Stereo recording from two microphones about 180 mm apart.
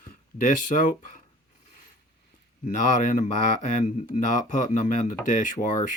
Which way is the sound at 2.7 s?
45° left (ahead or behind).